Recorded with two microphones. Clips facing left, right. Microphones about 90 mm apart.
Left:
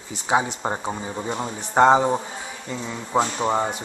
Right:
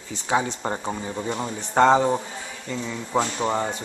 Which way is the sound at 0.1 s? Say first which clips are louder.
Left 2 dB; 15° left (ahead or behind).